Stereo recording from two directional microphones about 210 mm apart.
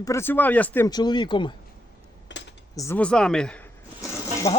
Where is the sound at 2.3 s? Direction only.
55° left (ahead or behind).